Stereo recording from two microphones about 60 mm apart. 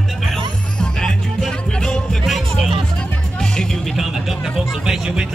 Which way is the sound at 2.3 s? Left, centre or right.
Centre.